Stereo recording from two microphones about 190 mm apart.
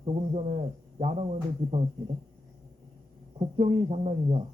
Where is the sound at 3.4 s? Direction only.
30° right (ahead or behind).